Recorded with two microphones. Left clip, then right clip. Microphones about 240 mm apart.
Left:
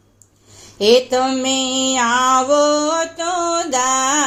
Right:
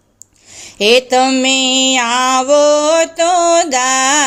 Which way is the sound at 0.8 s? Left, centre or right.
Right.